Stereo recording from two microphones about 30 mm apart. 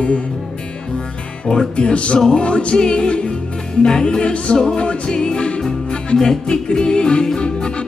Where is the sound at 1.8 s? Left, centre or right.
Left.